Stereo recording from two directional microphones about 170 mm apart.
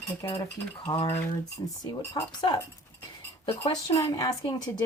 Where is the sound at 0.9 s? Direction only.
25° left (ahead or behind).